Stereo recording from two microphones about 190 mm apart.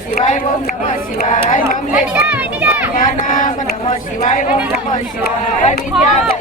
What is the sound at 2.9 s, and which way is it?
Speech, 45° left (ahead or behind).